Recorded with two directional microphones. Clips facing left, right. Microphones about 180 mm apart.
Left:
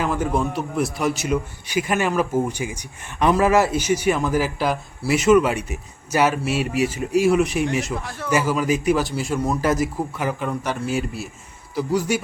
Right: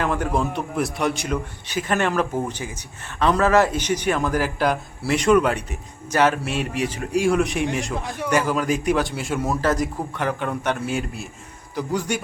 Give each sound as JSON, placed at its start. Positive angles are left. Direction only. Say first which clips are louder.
{"t": 0.0, "sound": "a man's voice", "louder": "left 1 dB", "side_deg": 0}
{"t": 7.9, "sound": "a man's voice", "louder": "right 2 dB", "side_deg": -20}
{"t": 8.3, "sound": "a man's voice", "louder": "left 1 dB", "side_deg": 5}